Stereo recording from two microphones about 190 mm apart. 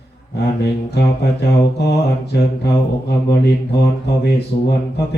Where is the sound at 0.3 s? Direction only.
60° left (ahead or behind).